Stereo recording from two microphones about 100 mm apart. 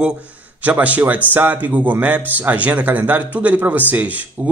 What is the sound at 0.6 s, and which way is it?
A man's voice, 15° right (ahead or behind).